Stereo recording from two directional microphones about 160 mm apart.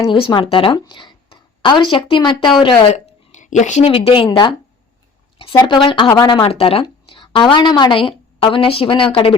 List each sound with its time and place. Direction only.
0.1 s speech: 30° left (ahead or behind)
2.9 s speech: 50° left (ahead or behind); by 4.5 s 30° left (ahead or behind)
5.6 s a woman's voice: 30° left (ahead or behind)